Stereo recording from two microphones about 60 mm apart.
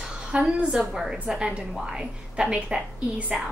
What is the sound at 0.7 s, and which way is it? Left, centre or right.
A woman's voice, centre.